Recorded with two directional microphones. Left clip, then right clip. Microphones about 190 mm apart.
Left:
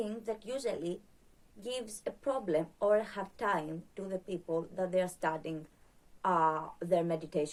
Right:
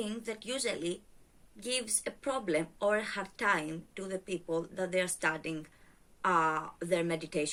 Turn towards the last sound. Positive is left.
turn(degrees=-15)  # may be behind; listen again after turning